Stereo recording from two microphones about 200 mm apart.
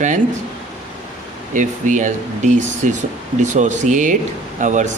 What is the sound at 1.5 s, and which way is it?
Speech, 40° right (ahead or behind).